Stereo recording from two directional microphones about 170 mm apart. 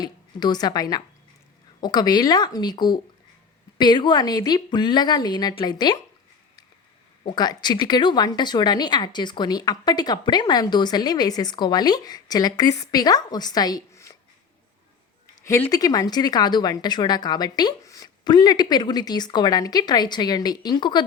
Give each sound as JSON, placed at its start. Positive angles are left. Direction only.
{"t": 0.0, "sound": "a woman's voice", "side_deg": 25}
{"t": 7.3, "sound": "a woman's voice", "side_deg": 25}
{"t": 15.4, "sound": "a woman's voice", "side_deg": 15}